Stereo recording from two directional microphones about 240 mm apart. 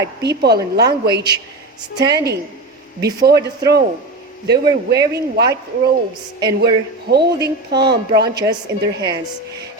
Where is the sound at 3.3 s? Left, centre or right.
Right.